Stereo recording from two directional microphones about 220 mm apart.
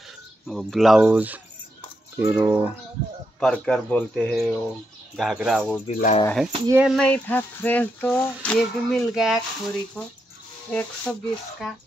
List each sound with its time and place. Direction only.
0.5 s speech: centre (ahead or behind)
3.3 s speech: 5° left (ahead or behind)
5.9 s speech: 35° left (ahead or behind)
6.2 s speech: centre (ahead or behind)